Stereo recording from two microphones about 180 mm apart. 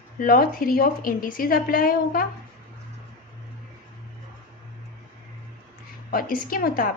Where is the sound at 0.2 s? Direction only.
55° left (ahead or behind).